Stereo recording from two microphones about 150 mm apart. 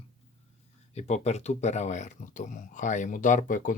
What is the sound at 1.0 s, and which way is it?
Speech, 50° left (ahead or behind).